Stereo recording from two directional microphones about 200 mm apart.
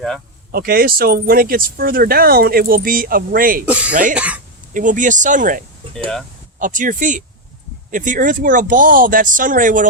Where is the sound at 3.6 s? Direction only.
5° right (ahead or behind).